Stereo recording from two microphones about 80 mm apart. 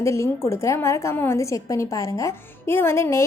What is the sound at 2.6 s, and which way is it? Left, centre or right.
Speech, left.